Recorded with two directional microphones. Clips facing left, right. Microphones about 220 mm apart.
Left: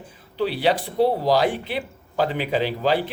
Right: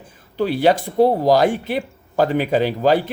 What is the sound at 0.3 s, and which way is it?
Speech, 45° right (ahead or behind).